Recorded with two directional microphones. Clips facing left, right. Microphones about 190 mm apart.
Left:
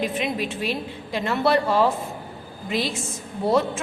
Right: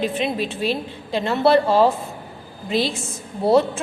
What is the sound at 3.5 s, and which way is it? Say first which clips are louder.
Speech: right 4 dB; 30° right (ahead or behind).